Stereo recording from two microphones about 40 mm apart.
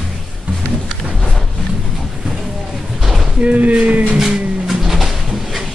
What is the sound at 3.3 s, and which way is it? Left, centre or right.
Speech, right.